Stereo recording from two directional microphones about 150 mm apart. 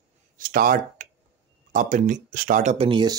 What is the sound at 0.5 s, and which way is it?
Speech, 70° right (ahead or behind).